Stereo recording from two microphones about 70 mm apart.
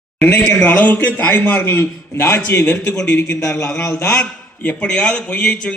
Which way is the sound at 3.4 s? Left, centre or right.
Left.